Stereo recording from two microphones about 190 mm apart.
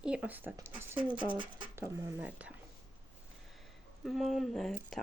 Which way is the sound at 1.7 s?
15° right (ahead or behind).